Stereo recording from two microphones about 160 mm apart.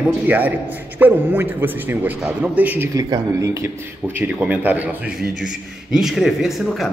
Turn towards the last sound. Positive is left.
turn(degrees=0)  # may be behind; listen again after turning